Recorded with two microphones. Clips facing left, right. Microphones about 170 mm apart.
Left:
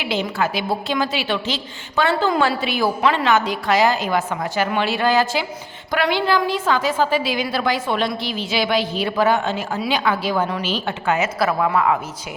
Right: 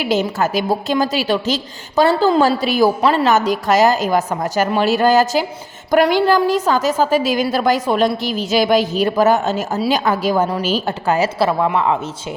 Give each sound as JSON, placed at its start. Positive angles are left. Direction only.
{"t": 0.0, "sound": "a woman's voice", "side_deg": -45}